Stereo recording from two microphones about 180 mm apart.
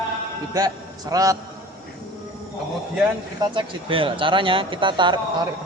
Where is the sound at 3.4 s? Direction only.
25° right (ahead or behind).